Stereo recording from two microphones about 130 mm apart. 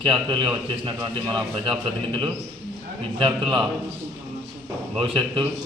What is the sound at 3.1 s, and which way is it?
Speech, 40° right (ahead or behind).